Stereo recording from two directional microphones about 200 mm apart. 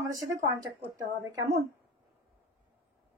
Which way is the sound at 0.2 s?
15° right (ahead or behind).